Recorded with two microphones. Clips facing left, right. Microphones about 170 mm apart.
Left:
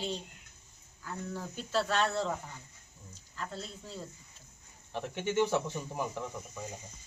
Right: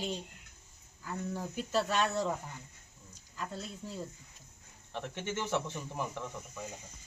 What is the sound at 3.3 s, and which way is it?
Speech, 10° right (ahead or behind).